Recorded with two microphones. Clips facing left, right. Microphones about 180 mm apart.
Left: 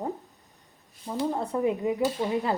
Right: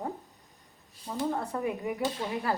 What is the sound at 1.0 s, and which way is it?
A woman's voice, 20° left (ahead or behind).